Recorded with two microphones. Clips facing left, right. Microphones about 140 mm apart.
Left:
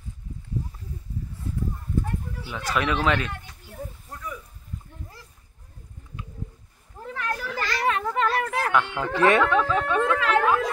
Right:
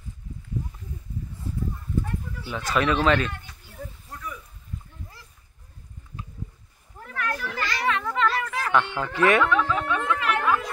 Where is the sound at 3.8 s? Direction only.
20° left (ahead or behind).